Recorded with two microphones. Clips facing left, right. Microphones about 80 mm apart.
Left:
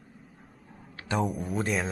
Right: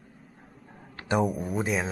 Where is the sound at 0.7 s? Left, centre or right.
Right.